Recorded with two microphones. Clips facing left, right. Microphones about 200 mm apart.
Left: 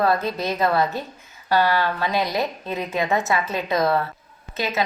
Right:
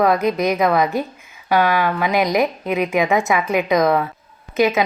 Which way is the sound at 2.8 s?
90° right.